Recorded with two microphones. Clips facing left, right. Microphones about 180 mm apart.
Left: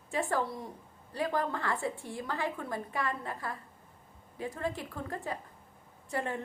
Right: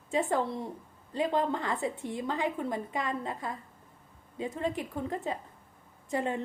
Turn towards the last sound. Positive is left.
turn(degrees=-20)  # may be behind; listen again after turning